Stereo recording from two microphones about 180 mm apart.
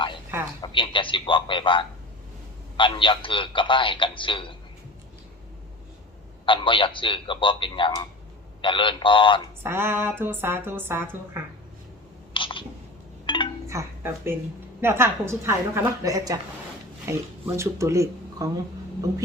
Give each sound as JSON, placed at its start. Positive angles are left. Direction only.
{"t": 0.6, "sound": "a man's voice", "side_deg": 25}
{"t": 6.4, "sound": "a man's voice", "side_deg": 25}
{"t": 9.6, "sound": "a woman's voice", "side_deg": -15}
{"t": 12.3, "sound": "a sound", "side_deg": 30}
{"t": 13.7, "sound": "a woman's voice", "side_deg": -15}